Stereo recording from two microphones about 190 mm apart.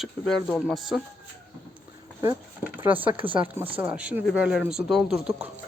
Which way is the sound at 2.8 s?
10° right (ahead or behind).